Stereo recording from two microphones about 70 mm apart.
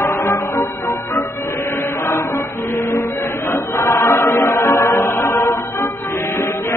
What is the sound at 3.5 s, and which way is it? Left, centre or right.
Chant, left.